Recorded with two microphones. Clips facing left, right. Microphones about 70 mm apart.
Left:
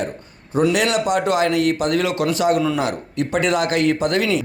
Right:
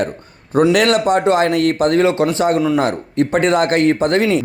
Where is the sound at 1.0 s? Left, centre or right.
Right.